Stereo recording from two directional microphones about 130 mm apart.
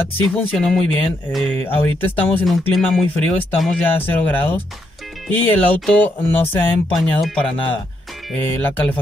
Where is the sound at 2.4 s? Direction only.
Centre (ahead or behind).